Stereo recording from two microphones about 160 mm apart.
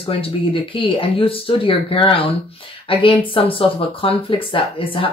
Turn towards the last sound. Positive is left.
turn(degrees=35)  # may be behind; listen again after turning